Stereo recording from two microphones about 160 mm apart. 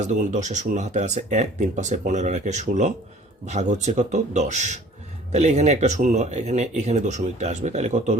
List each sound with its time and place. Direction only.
0.0 s speech: 50° right (ahead or behind)